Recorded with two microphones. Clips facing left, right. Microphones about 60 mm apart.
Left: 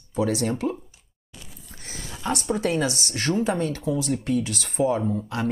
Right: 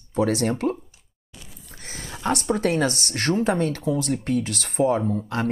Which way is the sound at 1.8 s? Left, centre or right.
Right.